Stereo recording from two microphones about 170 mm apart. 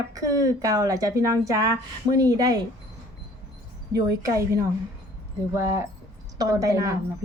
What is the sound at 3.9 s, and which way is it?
A woman's voice, 20° right (ahead or behind).